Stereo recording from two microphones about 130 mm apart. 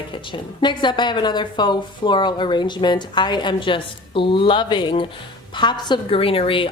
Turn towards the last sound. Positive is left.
turn(degrees=45)  # may be behind; listen again after turning